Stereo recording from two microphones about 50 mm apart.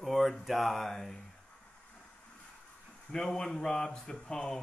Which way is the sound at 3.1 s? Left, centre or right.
Centre.